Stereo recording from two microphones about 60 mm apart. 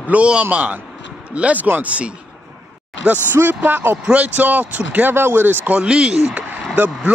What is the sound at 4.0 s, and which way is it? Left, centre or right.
Speech, centre.